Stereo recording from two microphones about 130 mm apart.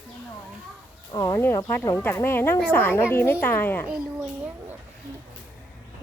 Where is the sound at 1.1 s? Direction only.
25° left (ahead or behind).